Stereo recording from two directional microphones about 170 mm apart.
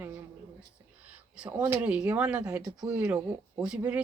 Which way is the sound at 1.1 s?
10° right (ahead or behind).